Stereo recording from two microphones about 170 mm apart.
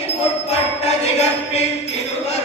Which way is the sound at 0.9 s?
40° left (ahead or behind).